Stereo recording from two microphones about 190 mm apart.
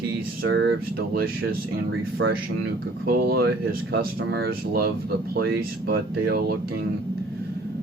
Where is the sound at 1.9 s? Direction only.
85° right.